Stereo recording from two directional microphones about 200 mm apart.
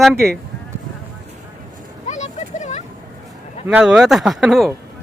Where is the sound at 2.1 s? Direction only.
35° left (ahead or behind).